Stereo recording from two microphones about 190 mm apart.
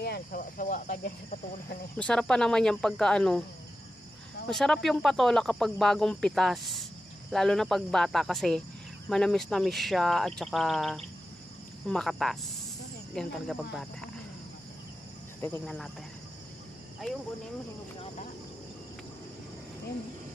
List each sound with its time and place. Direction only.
0.0 s speech: 50° left (ahead or behind)
2.0 s speech: 5° left (ahead or behind)
4.5 s speech: 5° left (ahead or behind)
15.6 s speech: centre (ahead or behind)